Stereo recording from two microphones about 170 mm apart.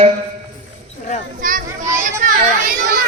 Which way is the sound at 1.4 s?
55° right (ahead or behind).